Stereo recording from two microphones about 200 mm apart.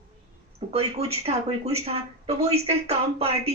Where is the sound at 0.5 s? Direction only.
30° right (ahead or behind).